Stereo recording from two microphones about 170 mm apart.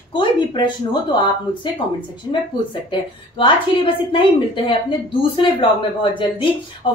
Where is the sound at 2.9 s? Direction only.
30° left (ahead or behind).